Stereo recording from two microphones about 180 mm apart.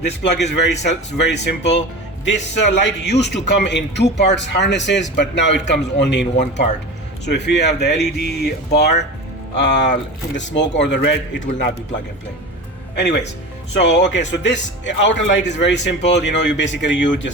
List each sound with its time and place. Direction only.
0.0 s a man's voice: 75° left (ahead or behind)
6.3 s speech: 40° left (ahead or behind)
7.3 s a man's voice: 70° left (ahead or behind)
13.8 s speech: 75° left (ahead or behind)